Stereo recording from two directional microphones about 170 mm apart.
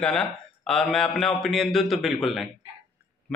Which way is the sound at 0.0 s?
5° left (ahead or behind).